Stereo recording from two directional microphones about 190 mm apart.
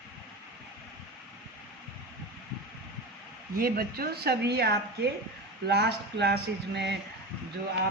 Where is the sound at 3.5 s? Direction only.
50° right (ahead or behind).